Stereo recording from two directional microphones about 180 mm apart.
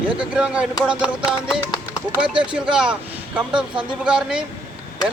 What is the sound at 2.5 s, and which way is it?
Speech, 5° right (ahead or behind).